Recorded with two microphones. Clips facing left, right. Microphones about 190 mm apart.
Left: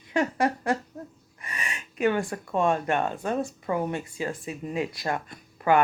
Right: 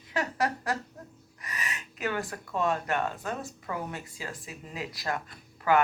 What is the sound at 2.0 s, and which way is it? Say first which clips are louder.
Speech: left 8 dB; 25° left (ahead or behind).